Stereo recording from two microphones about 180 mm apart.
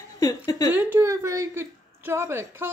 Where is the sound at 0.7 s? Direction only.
15° right (ahead or behind).